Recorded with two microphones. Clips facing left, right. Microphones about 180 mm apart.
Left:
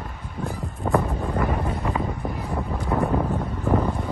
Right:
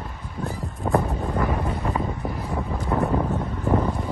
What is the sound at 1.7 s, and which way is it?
Wind noise, centre (ahead or behind).